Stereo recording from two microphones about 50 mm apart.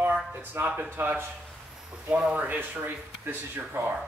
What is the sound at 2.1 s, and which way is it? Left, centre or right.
Speech, centre.